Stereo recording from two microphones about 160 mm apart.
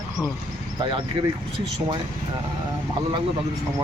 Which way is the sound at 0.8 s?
30° right (ahead or behind).